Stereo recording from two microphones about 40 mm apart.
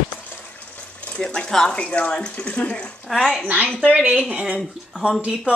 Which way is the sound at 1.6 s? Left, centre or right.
Left.